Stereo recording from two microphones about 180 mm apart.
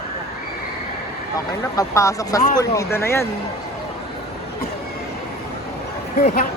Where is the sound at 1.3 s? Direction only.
20° left (ahead or behind).